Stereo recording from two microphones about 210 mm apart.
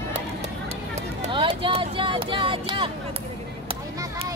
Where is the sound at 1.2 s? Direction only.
25° right (ahead or behind).